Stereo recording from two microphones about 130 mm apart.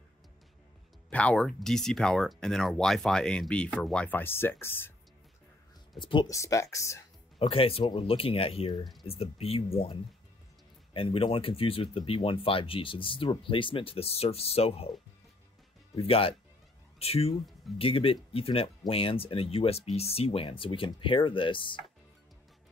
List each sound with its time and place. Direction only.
1.1 s speech: 10° left (ahead or behind)
5.9 s speech: 40° left (ahead or behind)
6.2 s speech: 25° left (ahead or behind)
7.3 s speech: 45° left (ahead or behind)
16.0 s speech: 45° left (ahead or behind)